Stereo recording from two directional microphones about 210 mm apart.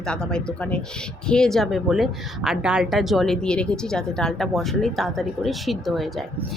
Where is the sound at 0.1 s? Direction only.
5° left (ahead or behind).